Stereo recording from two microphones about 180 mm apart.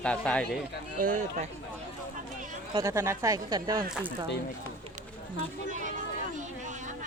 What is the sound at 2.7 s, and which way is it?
Speech, 15° right (ahead or behind).